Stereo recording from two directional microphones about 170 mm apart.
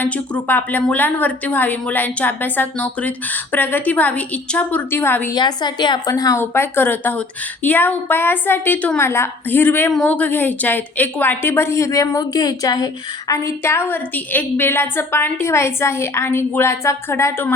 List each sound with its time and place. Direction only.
0.0 s a woman's voice: 10° left (ahead or behind)
5.4 s a woman's voice: 25° left (ahead or behind)